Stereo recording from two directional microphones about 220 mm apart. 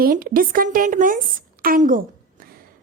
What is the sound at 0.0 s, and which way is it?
A woman's voice, 40° right (ahead or behind).